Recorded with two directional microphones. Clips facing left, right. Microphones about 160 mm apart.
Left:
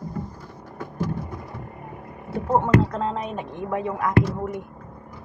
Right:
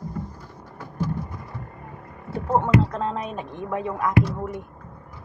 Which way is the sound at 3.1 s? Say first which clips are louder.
Left 1 dB; 20° left (ahead or behind).